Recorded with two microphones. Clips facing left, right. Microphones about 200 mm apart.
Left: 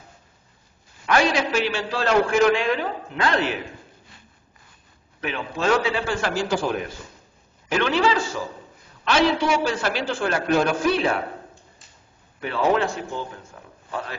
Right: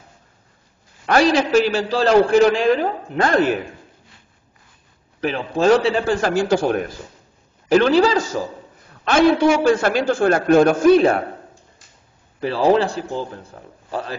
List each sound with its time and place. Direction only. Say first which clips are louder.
1.0 s a man's voice: right 5 dB; 40° right (ahead or behind)
5.2 s a man's voice: right 7 dB; 35° right (ahead or behind); by 6.9 s 50° right (ahead or behind)
7.6 s a man's voice: right 7 dB; 35° right (ahead or behind)
12.4 s a man's voice: right 5 dB; 35° right (ahead or behind)